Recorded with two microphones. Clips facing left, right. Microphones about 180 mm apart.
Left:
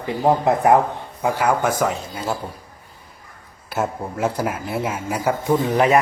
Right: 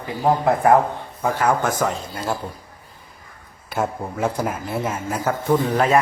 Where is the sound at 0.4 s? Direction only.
20° left (ahead or behind).